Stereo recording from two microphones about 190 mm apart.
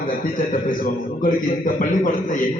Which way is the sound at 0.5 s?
45° left (ahead or behind).